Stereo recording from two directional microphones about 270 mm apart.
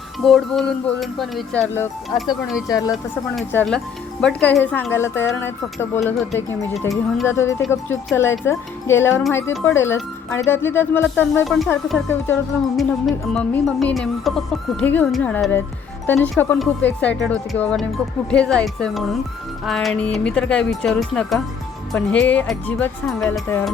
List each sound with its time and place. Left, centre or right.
0.2 s speech: centre